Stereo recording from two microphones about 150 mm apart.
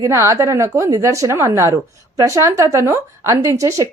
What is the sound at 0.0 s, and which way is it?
A woman's voice, 20° right (ahead or behind).